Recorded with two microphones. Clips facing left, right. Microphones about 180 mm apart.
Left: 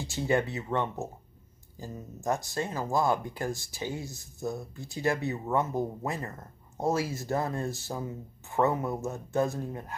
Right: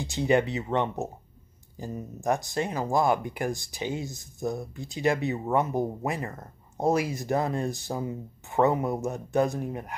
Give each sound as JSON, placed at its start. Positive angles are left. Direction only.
{"t": 0.0, "sound": "speech", "side_deg": -20}